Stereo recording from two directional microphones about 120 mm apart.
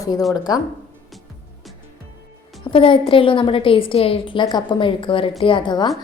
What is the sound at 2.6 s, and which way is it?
A woman's voice, 45° left (ahead or behind).